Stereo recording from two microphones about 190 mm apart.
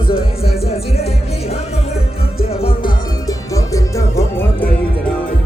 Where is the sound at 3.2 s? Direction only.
15° left (ahead or behind).